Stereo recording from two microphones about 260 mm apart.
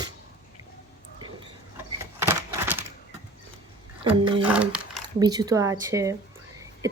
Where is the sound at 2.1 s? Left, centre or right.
Centre.